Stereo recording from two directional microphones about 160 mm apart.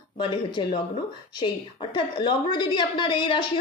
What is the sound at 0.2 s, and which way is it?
Speech, 30° left (ahead or behind).